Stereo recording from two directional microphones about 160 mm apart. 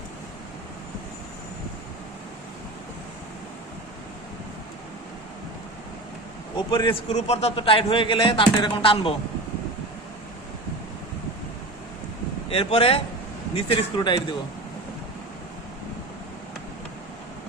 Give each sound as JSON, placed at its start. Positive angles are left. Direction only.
{"t": 6.6, "sound": "a man's voice", "side_deg": 30}
{"t": 12.5, "sound": "a man's voice", "side_deg": 35}